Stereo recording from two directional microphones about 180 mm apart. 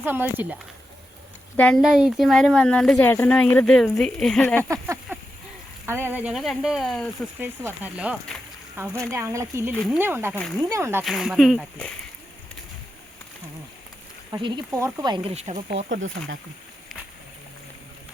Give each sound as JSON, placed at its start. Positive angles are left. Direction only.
{"t": 0.0, "sound": "speech", "side_deg": -10}
{"t": 1.5, "sound": "speech", "side_deg": 5}
{"t": 5.8, "sound": "speech", "side_deg": -10}
{"t": 7.3, "sound": "speech", "side_deg": -10}
{"t": 9.7, "sound": "speech", "side_deg": 5}
{"t": 10.0, "sound": "speech", "side_deg": -10}
{"t": 10.3, "sound": "speech", "side_deg": 10}
{"t": 10.7, "sound": "speech", "side_deg": -15}
{"t": 11.0, "sound": "speech", "side_deg": 0}
{"t": 14.3, "sound": "speech", "side_deg": -25}
{"t": 14.7, "sound": "speech", "side_deg": -15}